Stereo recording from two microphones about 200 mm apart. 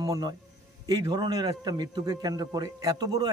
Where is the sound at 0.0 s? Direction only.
15° right (ahead or behind).